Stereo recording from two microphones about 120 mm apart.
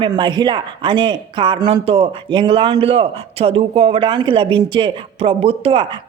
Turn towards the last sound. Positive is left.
turn(degrees=-50)  # may be behind; listen again after turning